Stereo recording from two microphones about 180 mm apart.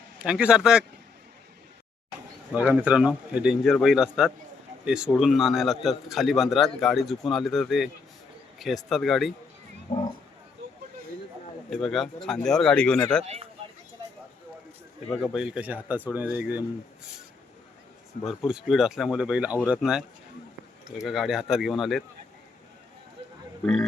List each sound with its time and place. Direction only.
0.2 s a man's voice: 5° right (ahead or behind)
2.5 s a man's voice: 10° right (ahead or behind)
11.7 s a man's voice: centre (ahead or behind)
13.2 s speech: 35° right (ahead or behind)
15.2 s speech: 5° right (ahead or behind)
18.3 s a man's voice: centre (ahead or behind)